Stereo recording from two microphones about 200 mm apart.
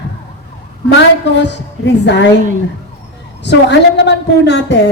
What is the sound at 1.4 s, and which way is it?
Speech, 60° left (ahead or behind).